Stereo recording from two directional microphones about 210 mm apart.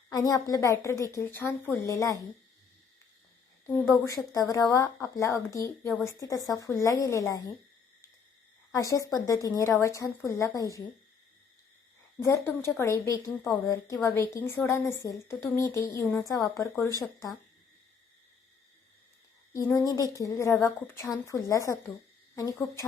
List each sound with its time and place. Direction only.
0.1 s a woman's voice: 15° left (ahead or behind)
3.8 s a woman's voice: 15° left (ahead or behind)
8.7 s a woman's voice: 15° left (ahead or behind)
12.2 s a woman's voice: 15° left (ahead or behind)
19.5 s a woman's voice: 15° left (ahead or behind)